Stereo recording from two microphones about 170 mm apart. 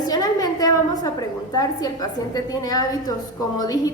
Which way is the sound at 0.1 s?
20° left (ahead or behind).